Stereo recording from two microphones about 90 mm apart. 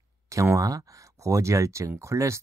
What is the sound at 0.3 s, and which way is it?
Speech, 35° right (ahead or behind).